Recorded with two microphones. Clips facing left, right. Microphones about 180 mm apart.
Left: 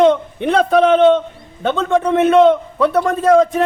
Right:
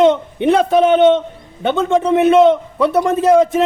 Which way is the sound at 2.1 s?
5° right (ahead or behind).